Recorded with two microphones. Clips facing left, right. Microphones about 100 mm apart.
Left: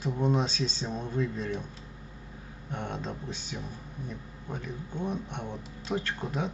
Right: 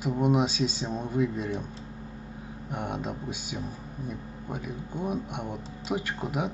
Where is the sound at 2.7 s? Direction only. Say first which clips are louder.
Right 3 dB; 10° right (ahead or behind).